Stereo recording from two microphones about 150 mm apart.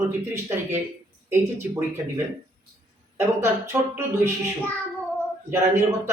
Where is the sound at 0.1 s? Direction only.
15° right (ahead or behind).